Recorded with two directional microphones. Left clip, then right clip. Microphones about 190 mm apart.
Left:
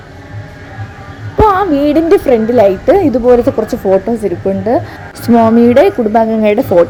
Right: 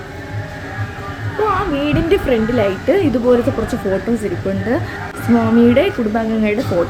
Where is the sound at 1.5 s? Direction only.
40° left (ahead or behind).